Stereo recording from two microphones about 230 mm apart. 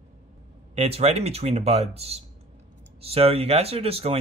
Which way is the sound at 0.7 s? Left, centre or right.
Right.